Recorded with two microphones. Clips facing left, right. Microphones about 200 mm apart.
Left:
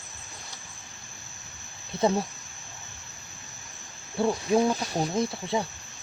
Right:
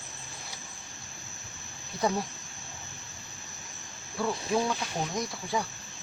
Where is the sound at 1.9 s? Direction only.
25° left (ahead or behind).